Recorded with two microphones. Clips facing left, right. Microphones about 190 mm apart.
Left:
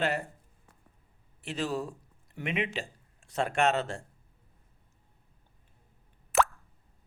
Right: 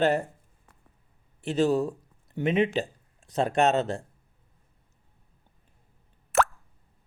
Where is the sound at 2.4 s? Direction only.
40° right (ahead or behind).